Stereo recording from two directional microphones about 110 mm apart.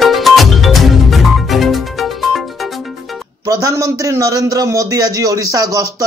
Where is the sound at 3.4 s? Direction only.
35° right (ahead or behind).